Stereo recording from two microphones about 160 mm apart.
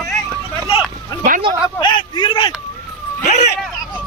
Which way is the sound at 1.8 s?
30° left (ahead or behind).